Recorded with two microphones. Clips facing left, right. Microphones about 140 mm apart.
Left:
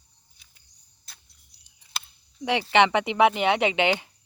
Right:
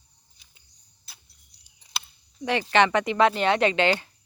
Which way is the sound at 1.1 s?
5° right (ahead or behind).